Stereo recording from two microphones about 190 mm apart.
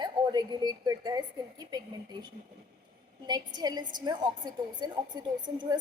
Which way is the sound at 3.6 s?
20° right (ahead or behind).